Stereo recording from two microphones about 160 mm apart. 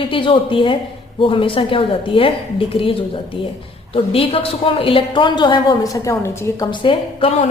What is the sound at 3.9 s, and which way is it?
A woman's voice, 35° left (ahead or behind).